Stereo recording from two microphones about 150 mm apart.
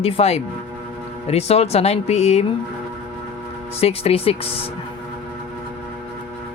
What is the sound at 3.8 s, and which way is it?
Speech, 40° left (ahead or behind).